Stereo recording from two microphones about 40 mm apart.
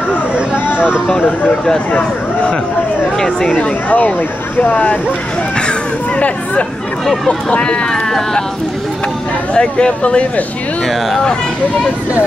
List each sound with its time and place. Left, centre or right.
0.7 s speech: right
3.5 s speech: left
6.1 s speech: left
9.5 s speech: left